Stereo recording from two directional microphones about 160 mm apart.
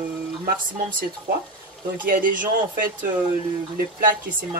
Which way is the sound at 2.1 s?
55° right (ahead or behind).